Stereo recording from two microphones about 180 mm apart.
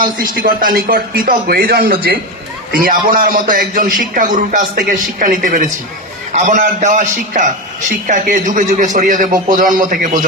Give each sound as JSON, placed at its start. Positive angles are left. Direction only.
{"t": 0.0, "sound": "a man's voice", "side_deg": -55}
{"t": 2.8, "sound": "speech", "side_deg": -50}